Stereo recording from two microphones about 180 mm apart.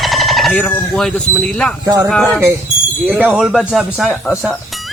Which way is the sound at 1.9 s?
15° right (ahead or behind).